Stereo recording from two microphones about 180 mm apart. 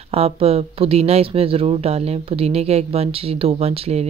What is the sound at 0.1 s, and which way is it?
Speech, 35° right (ahead or behind).